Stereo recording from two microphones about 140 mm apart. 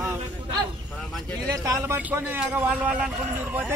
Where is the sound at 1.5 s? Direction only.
25° right (ahead or behind).